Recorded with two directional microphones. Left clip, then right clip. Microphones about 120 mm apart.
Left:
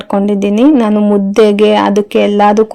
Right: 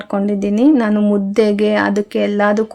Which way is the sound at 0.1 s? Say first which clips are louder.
Left 6 dB; 30° left (ahead or behind).